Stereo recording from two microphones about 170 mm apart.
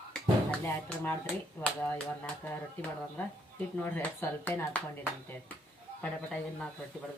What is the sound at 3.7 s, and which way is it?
Speech, 10° left (ahead or behind).